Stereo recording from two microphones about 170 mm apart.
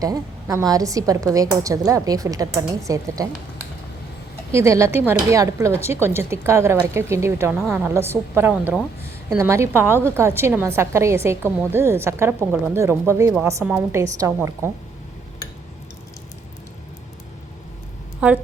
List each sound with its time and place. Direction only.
0.0 s a woman's voice: 20° right (ahead or behind)
4.5 s a woman's voice: 15° right (ahead or behind)
18.2 s a woman's voice: 10° right (ahead or behind)